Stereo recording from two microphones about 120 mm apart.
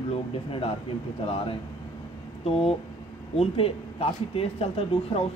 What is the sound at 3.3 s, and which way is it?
Speech, 55° left (ahead or behind).